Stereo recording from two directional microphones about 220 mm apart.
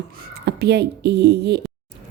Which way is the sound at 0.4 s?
50° right (ahead or behind).